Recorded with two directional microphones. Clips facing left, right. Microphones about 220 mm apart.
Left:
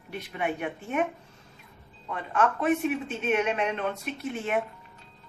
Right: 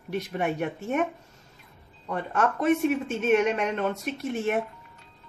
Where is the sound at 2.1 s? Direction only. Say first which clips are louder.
Right 1 dB; 40° right (ahead or behind).